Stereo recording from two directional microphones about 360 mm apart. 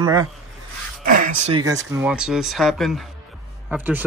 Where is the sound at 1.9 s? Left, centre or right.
Centre.